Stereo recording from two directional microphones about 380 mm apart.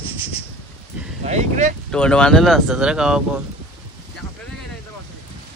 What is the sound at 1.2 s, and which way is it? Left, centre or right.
Speech, centre.